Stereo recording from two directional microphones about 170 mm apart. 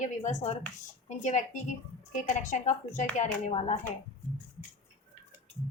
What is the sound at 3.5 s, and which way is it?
Speech, 35° left (ahead or behind).